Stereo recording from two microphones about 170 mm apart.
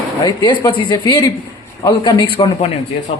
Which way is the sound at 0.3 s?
25° left (ahead or behind).